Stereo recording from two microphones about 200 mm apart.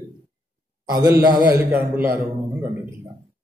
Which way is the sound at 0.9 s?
15° right (ahead or behind).